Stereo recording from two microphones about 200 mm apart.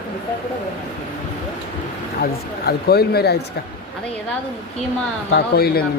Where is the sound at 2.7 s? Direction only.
50° left (ahead or behind).